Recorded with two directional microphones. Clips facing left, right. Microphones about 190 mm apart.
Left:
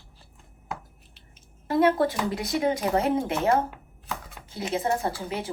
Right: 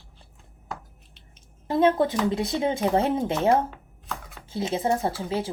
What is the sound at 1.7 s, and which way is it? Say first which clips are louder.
Speech: right 1 dB; 20° right (ahead or behind).